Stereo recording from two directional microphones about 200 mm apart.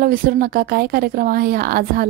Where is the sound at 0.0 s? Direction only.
45° right (ahead or behind).